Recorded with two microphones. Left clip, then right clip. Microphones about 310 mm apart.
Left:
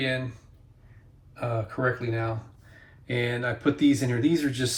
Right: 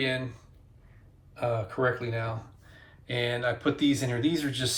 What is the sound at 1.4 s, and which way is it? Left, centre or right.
Speech, right.